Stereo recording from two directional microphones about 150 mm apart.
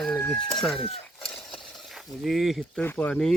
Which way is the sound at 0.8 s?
40° left (ahead or behind).